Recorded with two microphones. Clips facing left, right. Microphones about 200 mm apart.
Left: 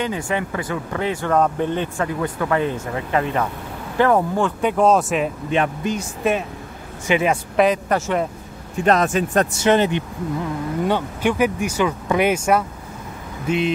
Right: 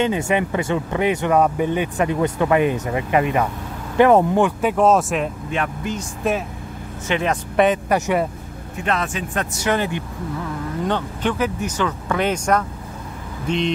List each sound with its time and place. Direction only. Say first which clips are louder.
0.0 s speech: right 4 dB; 25° right (ahead or behind)
4.6 s speech: even; 5° right (ahead or behind)
5.5 s speech: left 4 dB; 20° left (ahead or behind)
5.9 s speech: even; centre (ahead or behind)
8.8 s speech: left 6 dB; 40° left (ahead or behind)
9.5 s speech: left 5 dB; 25° left (ahead or behind)
10.9 s speech: left 1 dB; 10° left (ahead or behind)